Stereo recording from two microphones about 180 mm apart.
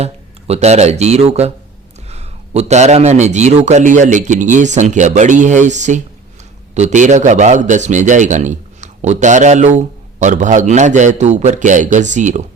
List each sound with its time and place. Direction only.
0.0 s a man's voice: 35° right (ahead or behind)